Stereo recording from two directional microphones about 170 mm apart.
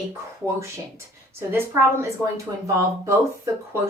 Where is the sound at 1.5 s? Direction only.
15° right (ahead or behind).